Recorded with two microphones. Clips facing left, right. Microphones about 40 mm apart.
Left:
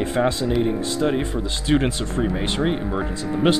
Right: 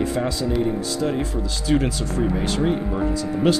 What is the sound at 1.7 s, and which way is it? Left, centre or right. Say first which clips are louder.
Speech: left 1 dB; left.